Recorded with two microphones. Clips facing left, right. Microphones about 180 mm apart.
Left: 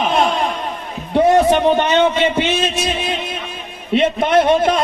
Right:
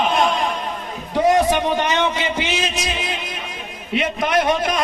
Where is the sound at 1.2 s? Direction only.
30° left (ahead or behind).